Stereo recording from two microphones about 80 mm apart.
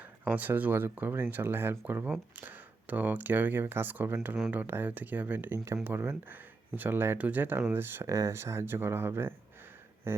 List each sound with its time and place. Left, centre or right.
0.3 s speech: right
8.0 s speech: right